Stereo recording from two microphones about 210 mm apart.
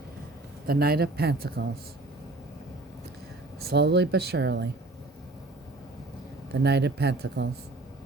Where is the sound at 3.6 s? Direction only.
55° right (ahead or behind).